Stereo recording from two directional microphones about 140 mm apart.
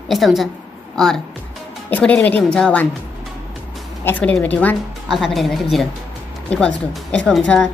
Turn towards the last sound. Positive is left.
turn(degrees=5)  # may be behind; listen again after turning